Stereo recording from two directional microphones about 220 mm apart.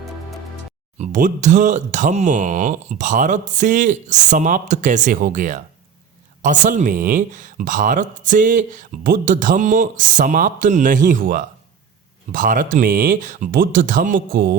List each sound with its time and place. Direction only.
0.9 s speech: 35° right (ahead or behind)